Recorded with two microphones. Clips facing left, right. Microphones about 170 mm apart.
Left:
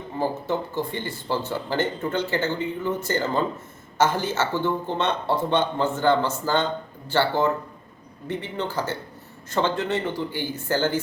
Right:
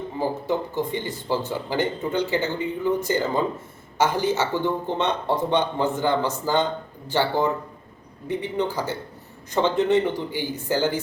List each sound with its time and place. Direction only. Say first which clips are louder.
0.8 s speech: right 2 dB; 15° right (ahead or behind)